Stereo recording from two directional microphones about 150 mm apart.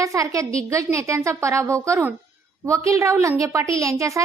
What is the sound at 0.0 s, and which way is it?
A woman's voice, 20° right (ahead or behind).